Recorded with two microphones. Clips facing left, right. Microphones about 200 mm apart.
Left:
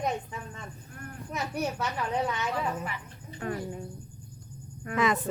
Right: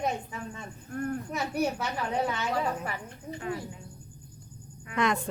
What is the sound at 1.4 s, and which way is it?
Speech, 30° right (ahead or behind).